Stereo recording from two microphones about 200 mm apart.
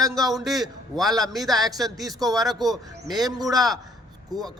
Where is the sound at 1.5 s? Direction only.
20° right (ahead or behind).